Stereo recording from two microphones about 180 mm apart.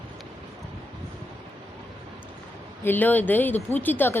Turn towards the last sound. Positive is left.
turn(degrees=10)  # may be behind; listen again after turning